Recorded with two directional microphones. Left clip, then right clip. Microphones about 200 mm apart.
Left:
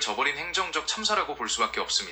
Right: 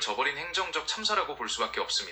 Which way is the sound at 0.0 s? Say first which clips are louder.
Left 2 dB; 10° left (ahead or behind).